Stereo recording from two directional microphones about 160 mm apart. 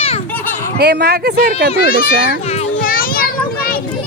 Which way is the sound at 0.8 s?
90° right.